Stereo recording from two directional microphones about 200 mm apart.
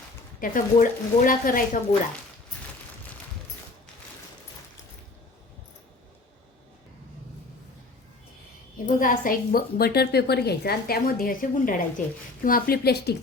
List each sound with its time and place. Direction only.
0.3 s a woman's voice: 45° left (ahead or behind)
9.0 s a woman's voice: 45° left (ahead or behind)